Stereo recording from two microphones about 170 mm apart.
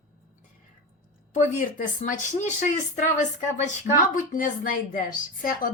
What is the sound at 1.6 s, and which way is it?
A woman's voice, 50° left (ahead or behind).